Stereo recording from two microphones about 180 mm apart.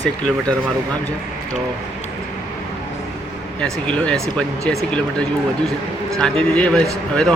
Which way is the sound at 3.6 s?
5° left (ahead or behind).